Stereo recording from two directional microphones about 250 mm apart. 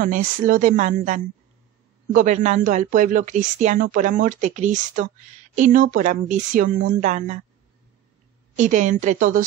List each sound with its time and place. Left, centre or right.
0.0 s speech: right
8.5 s speech: right